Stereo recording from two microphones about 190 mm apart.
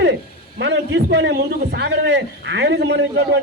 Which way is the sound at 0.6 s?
65° right (ahead or behind).